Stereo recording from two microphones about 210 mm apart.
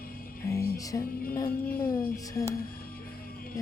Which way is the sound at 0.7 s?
15° left (ahead or behind).